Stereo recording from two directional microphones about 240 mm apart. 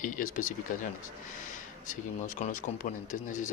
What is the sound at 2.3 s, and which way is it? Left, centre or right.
Speech, left.